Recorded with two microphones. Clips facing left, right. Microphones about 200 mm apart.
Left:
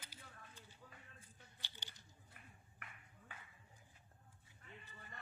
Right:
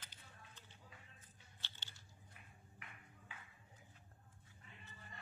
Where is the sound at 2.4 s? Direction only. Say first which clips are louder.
Left 3 dB; 55° left (ahead or behind).